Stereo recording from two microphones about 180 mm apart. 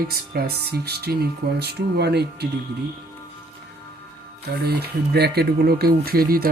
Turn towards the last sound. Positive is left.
turn(degrees=-55)  # may be behind; listen again after turning